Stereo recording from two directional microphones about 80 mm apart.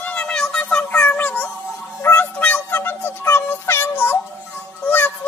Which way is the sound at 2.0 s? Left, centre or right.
Left.